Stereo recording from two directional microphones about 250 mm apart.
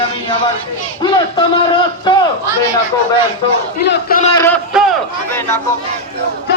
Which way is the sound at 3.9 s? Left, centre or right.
Left.